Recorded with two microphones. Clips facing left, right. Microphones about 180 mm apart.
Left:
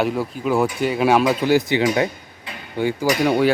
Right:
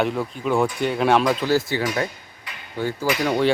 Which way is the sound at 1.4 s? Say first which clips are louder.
Left 4 dB; 15° left (ahead or behind).